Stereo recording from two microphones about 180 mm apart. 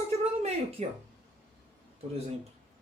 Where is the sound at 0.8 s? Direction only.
40° right (ahead or behind).